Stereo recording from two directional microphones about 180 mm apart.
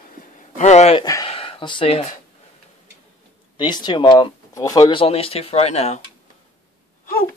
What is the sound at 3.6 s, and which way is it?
Speech, 25° left (ahead or behind).